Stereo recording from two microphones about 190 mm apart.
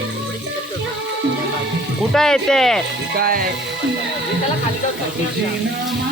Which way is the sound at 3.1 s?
50° right (ahead or behind).